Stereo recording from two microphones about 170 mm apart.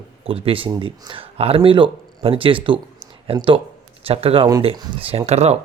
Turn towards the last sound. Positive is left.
turn(degrees=-40)  # may be behind; listen again after turning